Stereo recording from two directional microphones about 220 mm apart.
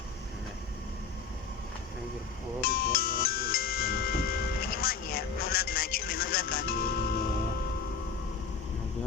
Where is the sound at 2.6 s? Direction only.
45° left (ahead or behind).